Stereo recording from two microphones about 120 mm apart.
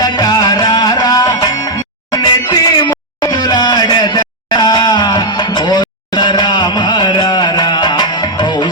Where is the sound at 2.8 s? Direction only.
35° left (ahead or behind).